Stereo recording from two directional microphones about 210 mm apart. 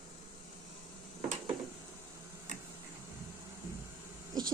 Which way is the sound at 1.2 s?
30° right (ahead or behind).